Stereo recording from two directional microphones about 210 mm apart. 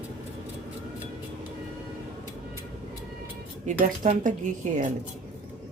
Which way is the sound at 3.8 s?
40° right (ahead or behind).